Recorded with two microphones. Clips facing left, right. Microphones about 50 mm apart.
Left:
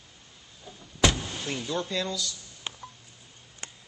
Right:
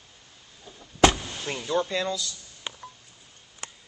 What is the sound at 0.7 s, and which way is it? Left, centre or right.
Vehicle, centre.